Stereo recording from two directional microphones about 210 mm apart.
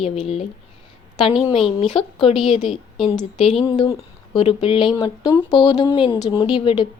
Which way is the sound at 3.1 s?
30° left (ahead or behind).